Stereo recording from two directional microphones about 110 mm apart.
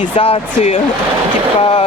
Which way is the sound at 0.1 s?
65° left (ahead or behind).